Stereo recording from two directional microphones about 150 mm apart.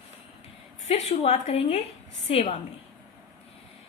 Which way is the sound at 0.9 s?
45° left (ahead or behind).